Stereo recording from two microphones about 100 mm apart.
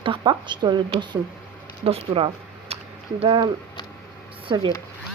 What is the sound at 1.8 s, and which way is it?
Speech, 70° right (ahead or behind).